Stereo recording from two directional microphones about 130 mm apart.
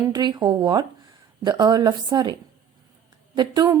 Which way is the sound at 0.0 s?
35° right (ahead or behind).